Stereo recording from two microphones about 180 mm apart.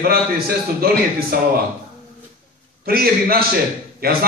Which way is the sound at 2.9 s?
55° right (ahead or behind).